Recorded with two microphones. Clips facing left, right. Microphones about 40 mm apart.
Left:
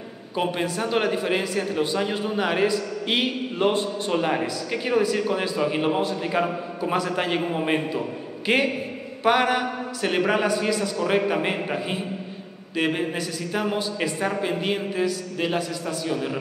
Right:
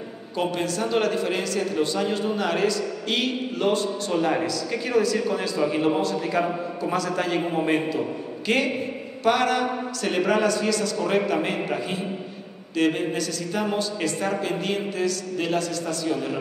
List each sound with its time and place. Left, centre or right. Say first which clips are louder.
0.4 s a man's voice: even; centre